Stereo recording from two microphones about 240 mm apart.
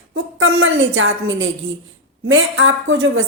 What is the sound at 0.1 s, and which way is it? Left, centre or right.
A woman's voice, right.